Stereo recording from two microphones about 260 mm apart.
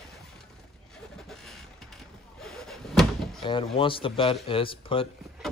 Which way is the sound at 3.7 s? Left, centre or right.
Centre.